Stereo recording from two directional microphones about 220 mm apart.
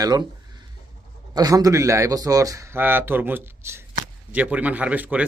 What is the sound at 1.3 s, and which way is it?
Speech, 15° right (ahead or behind).